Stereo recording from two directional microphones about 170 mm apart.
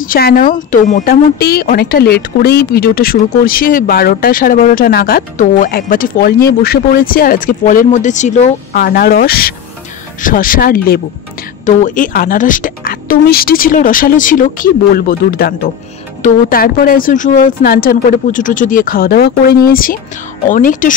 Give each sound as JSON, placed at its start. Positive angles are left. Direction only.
{"t": 0.0, "sound": "speech", "side_deg": 55}
{"t": 8.7, "sound": "speech", "side_deg": 65}
{"t": 11.6, "sound": "a woman's voice", "side_deg": 45}